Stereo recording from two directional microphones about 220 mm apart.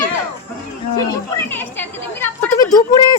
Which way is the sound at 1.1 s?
10° left (ahead or behind).